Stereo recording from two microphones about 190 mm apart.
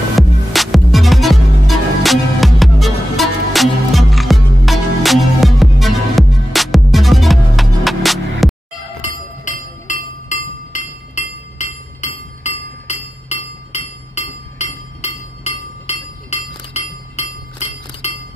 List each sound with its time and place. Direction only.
0.5 s music: centre (ahead or behind)
9.4 s chink: 40° left (ahead or behind)